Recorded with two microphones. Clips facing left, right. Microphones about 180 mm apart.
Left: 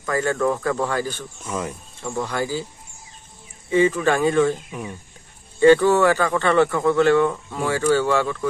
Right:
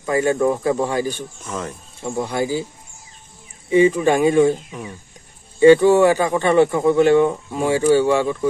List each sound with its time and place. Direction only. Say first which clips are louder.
0.0 s speech: right 4 dB; 15° right (ahead or behind)
1.5 s speech: left 1 dB; 10° left (ahead or behind)
2.0 s speech: right 3 dB; 15° right (ahead or behind)
3.7 s speech: right 4 dB; 15° right (ahead or behind)
4.6 s speech: even; 5° left (ahead or behind)
5.6 s speech: right 3 dB; 15° right (ahead or behind)